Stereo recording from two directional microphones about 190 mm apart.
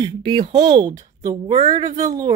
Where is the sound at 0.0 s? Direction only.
25° right (ahead or behind).